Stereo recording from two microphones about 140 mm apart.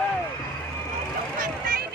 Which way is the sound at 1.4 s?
90° right.